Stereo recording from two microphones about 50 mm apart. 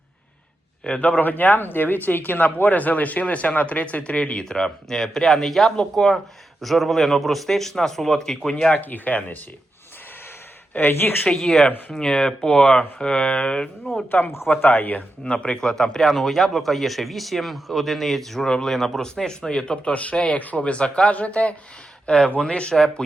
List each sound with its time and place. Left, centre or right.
0.9 s a man's voice: left
8.7 s speech: left
10.8 s speech: left
11.3 s speech: centre
13.9 s speech: left
14.6 s speech: left
15.2 s speech: centre